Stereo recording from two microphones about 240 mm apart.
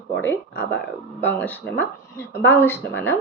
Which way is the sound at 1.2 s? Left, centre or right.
Centre.